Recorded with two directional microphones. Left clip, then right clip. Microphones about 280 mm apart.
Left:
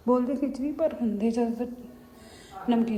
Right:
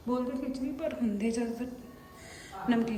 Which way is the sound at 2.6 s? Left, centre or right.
Centre.